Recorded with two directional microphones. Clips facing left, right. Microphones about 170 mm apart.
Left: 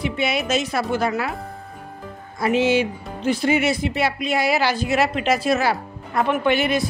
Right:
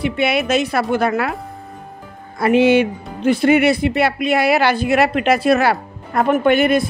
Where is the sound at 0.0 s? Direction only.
60° right (ahead or behind).